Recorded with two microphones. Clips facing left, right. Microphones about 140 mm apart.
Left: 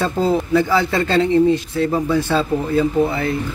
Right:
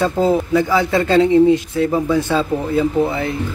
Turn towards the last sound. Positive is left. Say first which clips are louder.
# even
turn(degrees=-15)  # may be behind; listen again after turning